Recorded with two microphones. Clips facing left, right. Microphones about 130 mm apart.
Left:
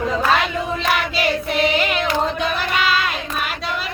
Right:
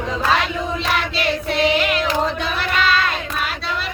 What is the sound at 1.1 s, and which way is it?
Child singing, centre (ahead or behind).